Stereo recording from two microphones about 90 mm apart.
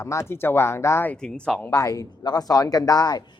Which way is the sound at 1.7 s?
40° left (ahead or behind).